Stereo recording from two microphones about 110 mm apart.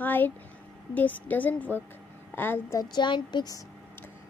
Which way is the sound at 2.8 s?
40° left (ahead or behind).